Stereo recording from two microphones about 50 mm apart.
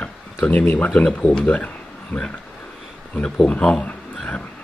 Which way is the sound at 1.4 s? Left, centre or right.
Left.